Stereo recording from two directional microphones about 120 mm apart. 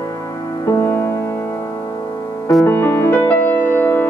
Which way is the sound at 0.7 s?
20° left (ahead or behind).